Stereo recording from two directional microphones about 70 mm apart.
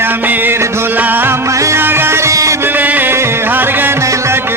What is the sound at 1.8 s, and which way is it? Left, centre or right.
Music, right.